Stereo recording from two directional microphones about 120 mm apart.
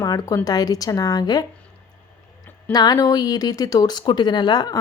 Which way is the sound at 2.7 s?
35° left (ahead or behind).